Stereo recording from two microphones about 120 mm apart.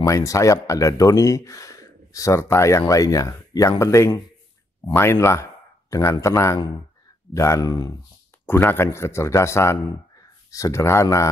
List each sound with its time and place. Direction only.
0.0 s a man's voice: 30° left (ahead or behind)
8.5 s speech: 20° left (ahead or behind)